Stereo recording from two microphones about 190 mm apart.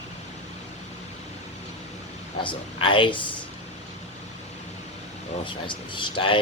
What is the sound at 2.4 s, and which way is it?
Speech, 25° left (ahead or behind).